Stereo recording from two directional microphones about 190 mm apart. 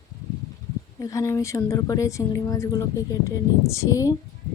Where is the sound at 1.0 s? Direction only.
15° left (ahead or behind).